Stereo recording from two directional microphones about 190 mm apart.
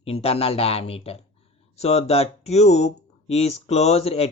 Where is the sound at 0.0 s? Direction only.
30° left (ahead or behind).